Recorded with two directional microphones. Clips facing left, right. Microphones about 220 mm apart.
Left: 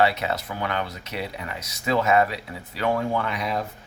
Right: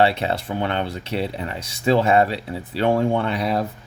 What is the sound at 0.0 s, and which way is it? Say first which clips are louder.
Speech: right 3 dB; 30° right (ahead or behind).